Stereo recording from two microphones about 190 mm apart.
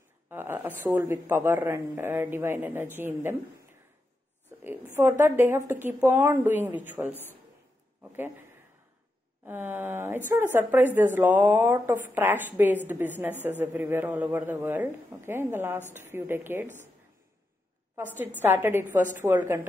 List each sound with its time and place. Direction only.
0.3 s a woman's voice: 10° right (ahead or behind)
4.6 s a woman's voice: 15° right (ahead or behind)
9.5 s a woman's voice: 10° right (ahead or behind)
16.6 s speech: 40° right (ahead or behind)
17.9 s a woman's voice: 10° right (ahead or behind)